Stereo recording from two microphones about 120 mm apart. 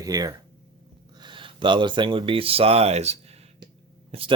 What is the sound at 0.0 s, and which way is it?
Speech, 30° right (ahead or behind).